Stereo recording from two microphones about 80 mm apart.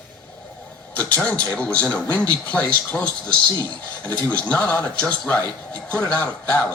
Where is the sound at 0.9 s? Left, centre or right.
Left.